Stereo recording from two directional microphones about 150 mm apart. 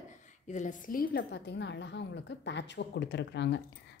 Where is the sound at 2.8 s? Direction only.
90° left.